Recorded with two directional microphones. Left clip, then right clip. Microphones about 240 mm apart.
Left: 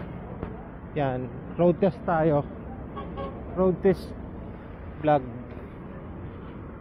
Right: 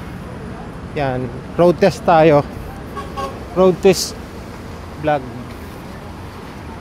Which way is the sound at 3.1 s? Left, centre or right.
Right.